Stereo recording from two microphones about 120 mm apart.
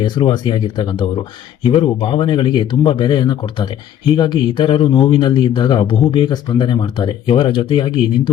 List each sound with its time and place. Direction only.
0.0 s speech: 40° left (ahead or behind)